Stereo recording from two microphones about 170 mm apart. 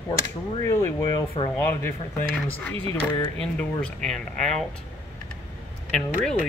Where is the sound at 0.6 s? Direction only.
15° left (ahead or behind).